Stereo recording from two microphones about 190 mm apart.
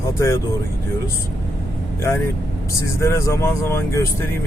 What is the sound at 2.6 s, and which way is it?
Speech, 15° left (ahead or behind).